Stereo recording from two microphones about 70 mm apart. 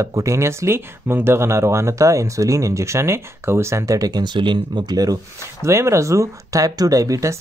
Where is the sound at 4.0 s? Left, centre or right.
Right.